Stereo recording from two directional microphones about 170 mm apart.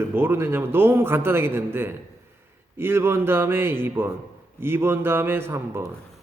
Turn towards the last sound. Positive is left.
turn(degrees=-15)  # may be behind; listen again after turning